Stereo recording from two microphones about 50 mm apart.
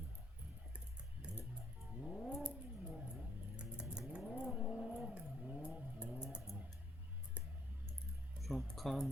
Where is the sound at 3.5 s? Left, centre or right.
Centre.